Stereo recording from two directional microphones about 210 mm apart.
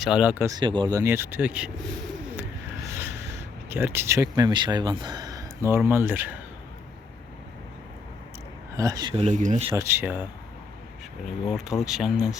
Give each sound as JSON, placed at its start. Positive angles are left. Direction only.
{"t": 0.0, "sound": "speech", "side_deg": -5}
{"t": 3.7, "sound": "speech", "side_deg": -10}
{"t": 8.7, "sound": "speech", "side_deg": -15}
{"t": 9.7, "sound": "speech", "side_deg": -10}
{"t": 11.4, "sound": "speech", "side_deg": 0}